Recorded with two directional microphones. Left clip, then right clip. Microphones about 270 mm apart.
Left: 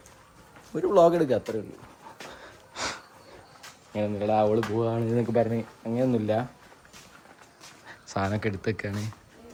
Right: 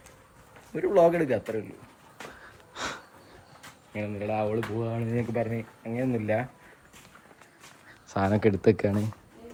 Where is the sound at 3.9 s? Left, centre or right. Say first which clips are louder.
Left 5 dB; centre.